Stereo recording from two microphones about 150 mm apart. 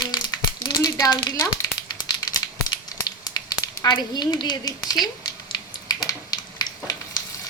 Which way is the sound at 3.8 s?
30° left (ahead or behind).